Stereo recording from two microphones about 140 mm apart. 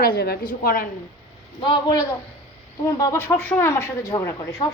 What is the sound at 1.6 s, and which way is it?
A man's voice, 30° left (ahead or behind).